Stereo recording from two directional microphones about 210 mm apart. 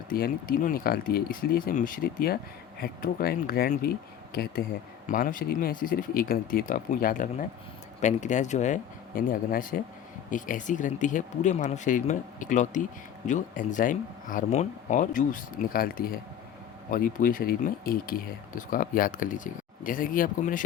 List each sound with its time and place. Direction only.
0.1 s speech: 45° left (ahead or behind)